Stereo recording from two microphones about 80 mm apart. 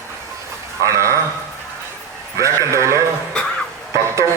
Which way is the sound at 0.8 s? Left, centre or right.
Right.